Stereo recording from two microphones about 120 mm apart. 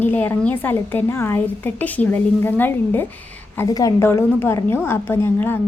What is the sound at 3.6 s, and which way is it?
A woman's voice, 30° left (ahead or behind).